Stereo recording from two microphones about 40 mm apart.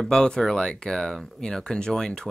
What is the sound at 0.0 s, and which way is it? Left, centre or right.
Speech, centre.